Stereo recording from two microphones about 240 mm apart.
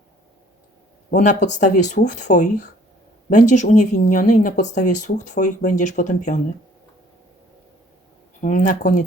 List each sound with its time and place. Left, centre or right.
1.1 s speech: left
8.4 s speech: left